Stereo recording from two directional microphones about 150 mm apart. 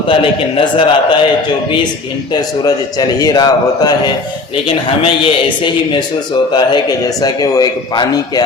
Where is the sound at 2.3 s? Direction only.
25° left (ahead or behind).